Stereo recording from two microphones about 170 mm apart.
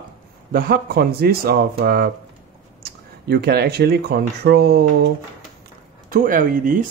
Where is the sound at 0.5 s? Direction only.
60° right (ahead or behind).